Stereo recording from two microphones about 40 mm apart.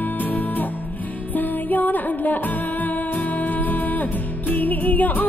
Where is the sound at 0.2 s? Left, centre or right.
Left.